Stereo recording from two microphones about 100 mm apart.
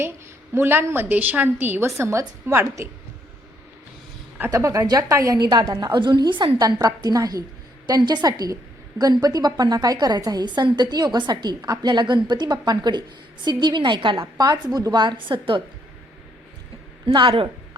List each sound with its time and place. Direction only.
0.5 s a woman's voice: 20° right (ahead or behind)
4.5 s a woman's voice: 30° right (ahead or behind); by 14.3 s 55° right (ahead or behind)
14.3 s a woman's voice: 40° right (ahead or behind)
17.2 s speech: 55° right (ahead or behind)